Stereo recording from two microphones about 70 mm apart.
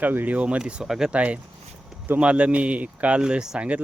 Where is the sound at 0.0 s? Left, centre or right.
Right; by 1.1 s centre.